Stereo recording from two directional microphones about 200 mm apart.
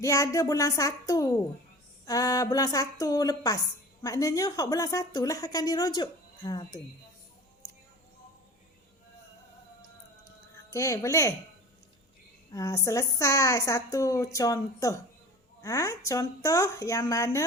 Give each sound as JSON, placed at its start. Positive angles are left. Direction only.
{"t": 0.0, "sound": "a woman's voice", "side_deg": 15}
{"t": 10.7, "sound": "a woman's voice", "side_deg": 15}
{"t": 12.5, "sound": "a woman's voice", "side_deg": 15}